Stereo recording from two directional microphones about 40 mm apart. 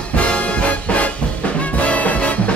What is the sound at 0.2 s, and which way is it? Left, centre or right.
Music, left.